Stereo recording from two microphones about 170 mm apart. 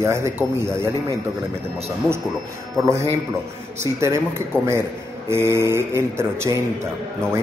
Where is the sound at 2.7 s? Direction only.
15° right (ahead or behind).